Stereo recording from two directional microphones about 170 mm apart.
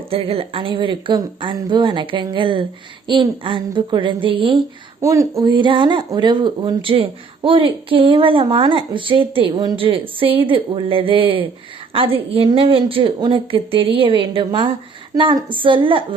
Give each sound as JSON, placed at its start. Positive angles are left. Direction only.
{"t": 0.1, "sound": "speech", "side_deg": -35}
{"t": 4.9, "sound": "a woman's voice", "side_deg": -15}